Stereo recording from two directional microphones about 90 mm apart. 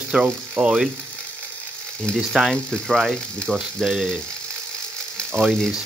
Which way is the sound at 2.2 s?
5° right (ahead or behind).